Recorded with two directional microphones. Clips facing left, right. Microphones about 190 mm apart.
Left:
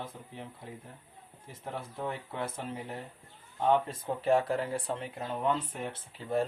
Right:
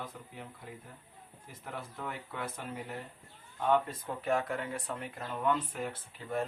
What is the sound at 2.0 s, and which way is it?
Speech, 25° left (ahead or behind).